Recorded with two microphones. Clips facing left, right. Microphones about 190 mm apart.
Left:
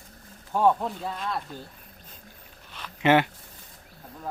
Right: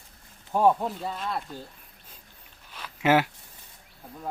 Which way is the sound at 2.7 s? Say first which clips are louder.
Left 1 dB; 5° right (ahead or behind).